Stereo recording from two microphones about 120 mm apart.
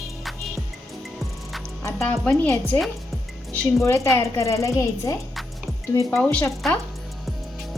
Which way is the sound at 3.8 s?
25° left (ahead or behind).